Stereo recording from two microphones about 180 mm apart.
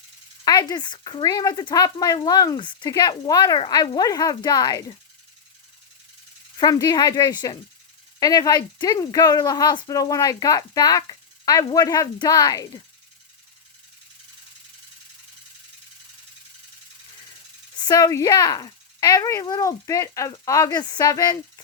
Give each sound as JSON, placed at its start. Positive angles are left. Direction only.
{"t": 0.4, "sound": "a woman's voice", "side_deg": 20}
{"t": 6.6, "sound": "a woman's voice", "side_deg": 20}
{"t": 17.8, "sound": "a woman's voice", "side_deg": 20}